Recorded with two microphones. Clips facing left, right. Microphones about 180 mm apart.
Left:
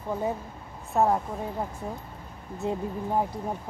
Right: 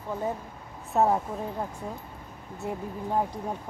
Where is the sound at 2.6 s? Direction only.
20° left (ahead or behind).